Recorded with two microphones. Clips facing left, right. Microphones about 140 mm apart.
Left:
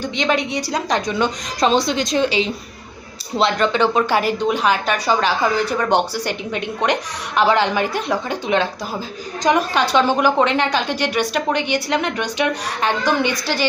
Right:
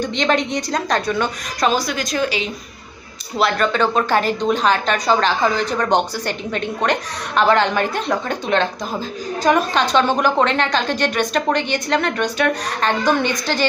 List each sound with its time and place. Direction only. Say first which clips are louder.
0.0 s a woman's voice: right 1 dB; 10° left (ahead or behind)